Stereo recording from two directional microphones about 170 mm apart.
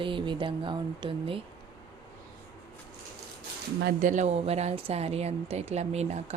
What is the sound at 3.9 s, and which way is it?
Speech, 50° right (ahead or behind).